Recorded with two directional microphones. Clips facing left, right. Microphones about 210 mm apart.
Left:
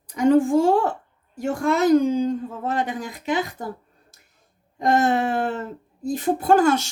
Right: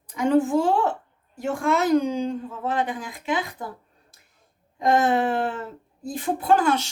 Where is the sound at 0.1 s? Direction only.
45° left (ahead or behind).